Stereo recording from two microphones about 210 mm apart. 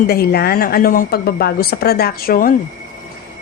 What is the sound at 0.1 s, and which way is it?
A woman's voice, 45° left (ahead or behind).